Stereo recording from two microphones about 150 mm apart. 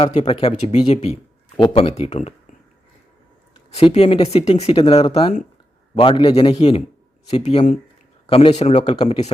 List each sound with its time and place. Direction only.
0.0 s speech: 40° left (ahead or behind)
3.9 s speech: 40° left (ahead or behind)